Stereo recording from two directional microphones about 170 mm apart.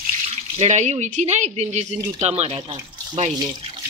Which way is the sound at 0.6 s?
40° right (ahead or behind).